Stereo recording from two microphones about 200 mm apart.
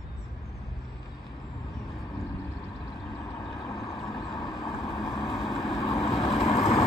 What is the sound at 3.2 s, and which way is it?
Vehicle, 15° left (ahead or behind).